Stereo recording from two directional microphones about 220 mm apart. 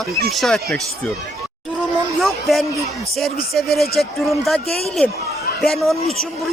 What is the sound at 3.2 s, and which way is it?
Music, centre (ahead or behind).